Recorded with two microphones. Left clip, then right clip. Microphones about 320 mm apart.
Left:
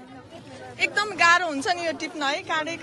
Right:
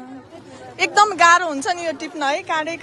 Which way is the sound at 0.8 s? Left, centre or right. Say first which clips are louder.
Right 8 dB; centre.